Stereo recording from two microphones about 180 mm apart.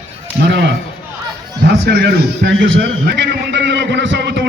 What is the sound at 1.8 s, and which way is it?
A man's voice, 65° right (ahead or behind).